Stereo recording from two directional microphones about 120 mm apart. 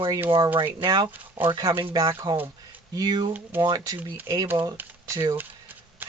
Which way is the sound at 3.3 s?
15° right (ahead or behind).